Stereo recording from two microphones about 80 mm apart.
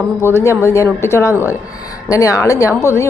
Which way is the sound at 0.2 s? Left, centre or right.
Left.